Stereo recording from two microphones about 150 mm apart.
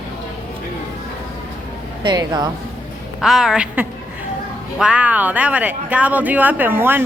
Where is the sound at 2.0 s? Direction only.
25° right (ahead or behind).